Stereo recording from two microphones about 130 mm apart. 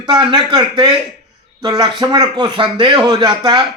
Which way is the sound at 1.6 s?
30° right (ahead or behind).